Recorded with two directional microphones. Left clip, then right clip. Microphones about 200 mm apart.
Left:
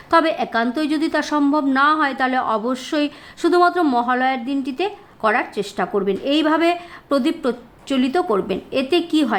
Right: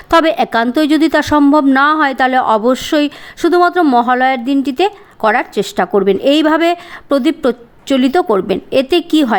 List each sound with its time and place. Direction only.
0.1 s speech: 30° right (ahead or behind)